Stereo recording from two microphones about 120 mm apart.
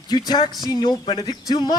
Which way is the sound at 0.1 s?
35° left (ahead or behind).